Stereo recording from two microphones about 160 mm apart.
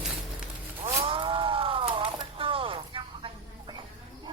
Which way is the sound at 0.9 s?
35° right (ahead or behind).